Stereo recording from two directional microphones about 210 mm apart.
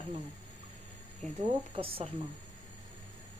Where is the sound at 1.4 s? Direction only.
25° right (ahead or behind).